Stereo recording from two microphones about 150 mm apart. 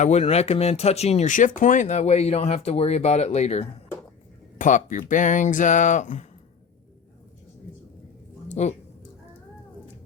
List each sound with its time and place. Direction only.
0.0 s speech: 45° left (ahead or behind)
4.5 s speech: 60° left (ahead or behind)
8.6 s speech: 50° left (ahead or behind)